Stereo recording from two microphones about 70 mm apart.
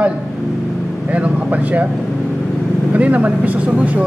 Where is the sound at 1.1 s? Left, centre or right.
Centre.